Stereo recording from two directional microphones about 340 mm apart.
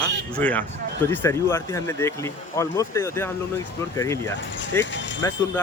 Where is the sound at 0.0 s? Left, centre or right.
Centre.